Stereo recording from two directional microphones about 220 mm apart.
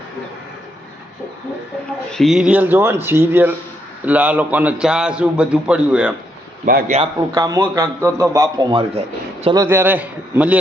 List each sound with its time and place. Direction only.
2.1 s a man's voice: centre (ahead or behind)
6.7 s a man's voice: 40° right (ahead or behind)
7.3 s a man's voice: 15° right (ahead or behind)
9.6 s a man's voice: 10° right (ahead or behind)